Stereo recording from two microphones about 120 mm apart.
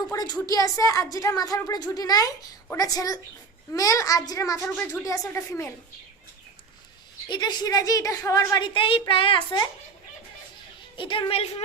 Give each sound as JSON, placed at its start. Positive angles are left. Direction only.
{"t": 0.1, "sound": "a sound", "side_deg": 30}
{"t": 0.4, "sound": "a woman's voice", "side_deg": 30}
{"t": 7.3, "sound": "a woman's voice", "side_deg": 35}
{"t": 10.9, "sound": "a woman's voice", "side_deg": 45}